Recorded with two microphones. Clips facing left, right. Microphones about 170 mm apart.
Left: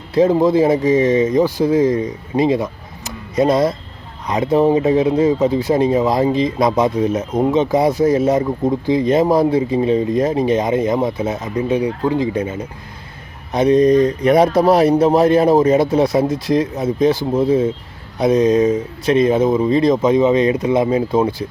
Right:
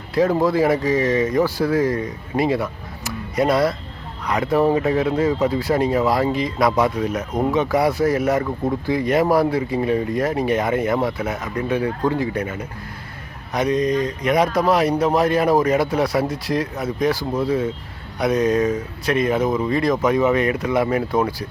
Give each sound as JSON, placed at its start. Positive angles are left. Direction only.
{"t": 0.1, "sound": "speech", "side_deg": 20}